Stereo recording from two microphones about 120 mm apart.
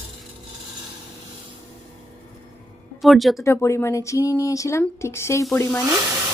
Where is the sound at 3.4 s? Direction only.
25° left (ahead or behind).